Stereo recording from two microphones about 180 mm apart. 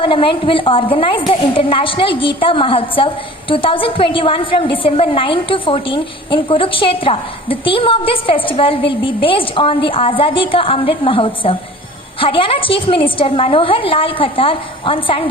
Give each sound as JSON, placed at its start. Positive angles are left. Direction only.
{"t": 0.0, "sound": "a woman's voice", "side_deg": 30}